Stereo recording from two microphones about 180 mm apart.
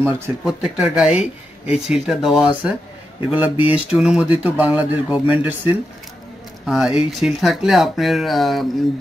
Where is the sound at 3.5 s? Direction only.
30° left (ahead or behind).